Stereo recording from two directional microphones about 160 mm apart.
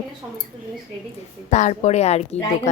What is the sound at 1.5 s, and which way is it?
Speech, 45° left (ahead or behind).